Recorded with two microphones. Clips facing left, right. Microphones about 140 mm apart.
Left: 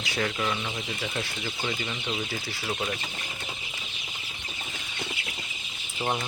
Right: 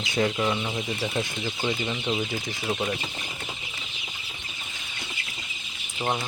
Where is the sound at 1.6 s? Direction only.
20° right (ahead or behind).